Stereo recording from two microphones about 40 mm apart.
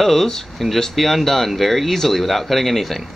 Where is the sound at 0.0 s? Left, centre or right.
Centre.